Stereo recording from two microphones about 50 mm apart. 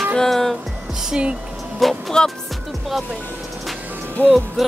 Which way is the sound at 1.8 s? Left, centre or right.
Centre.